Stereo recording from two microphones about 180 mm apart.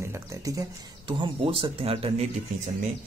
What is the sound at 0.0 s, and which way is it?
Speech, 15° right (ahead or behind).